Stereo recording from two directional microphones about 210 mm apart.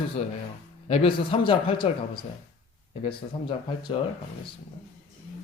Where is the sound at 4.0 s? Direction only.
25° left (ahead or behind).